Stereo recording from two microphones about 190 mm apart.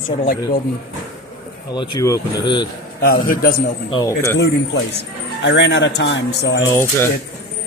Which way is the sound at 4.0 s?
15° left (ahead or behind).